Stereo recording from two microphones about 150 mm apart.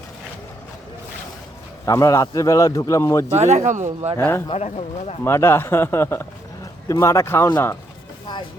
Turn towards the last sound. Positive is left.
turn(degrees=15)  # may be behind; listen again after turning